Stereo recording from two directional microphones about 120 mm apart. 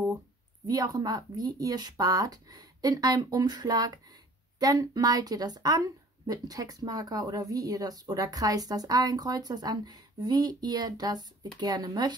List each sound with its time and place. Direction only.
0.7 s a woman's voice: 30° right (ahead or behind)